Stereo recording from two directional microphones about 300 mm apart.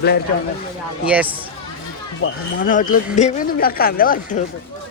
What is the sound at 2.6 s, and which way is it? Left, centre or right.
Speech, left.